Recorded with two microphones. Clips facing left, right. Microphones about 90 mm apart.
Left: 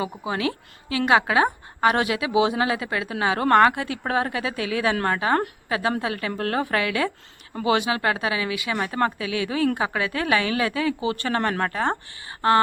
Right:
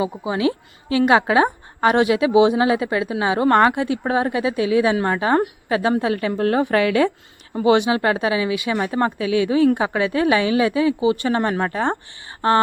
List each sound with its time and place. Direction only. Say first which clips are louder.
0.0 s a woman's voice: right 5 dB; 20° right (ahead or behind)